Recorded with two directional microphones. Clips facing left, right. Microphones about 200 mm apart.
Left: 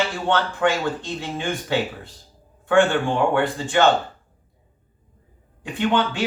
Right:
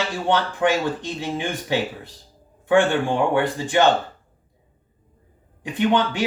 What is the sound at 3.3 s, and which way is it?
Speech, 15° right (ahead or behind).